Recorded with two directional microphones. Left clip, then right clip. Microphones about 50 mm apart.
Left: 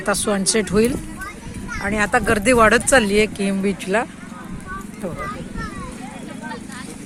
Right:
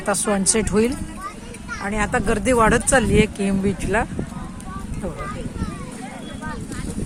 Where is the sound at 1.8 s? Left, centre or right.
Centre.